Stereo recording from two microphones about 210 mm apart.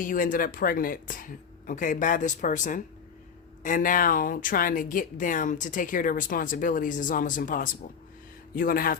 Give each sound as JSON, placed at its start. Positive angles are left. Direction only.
{"t": 0.0, "sound": "a woman's voice", "side_deg": 40}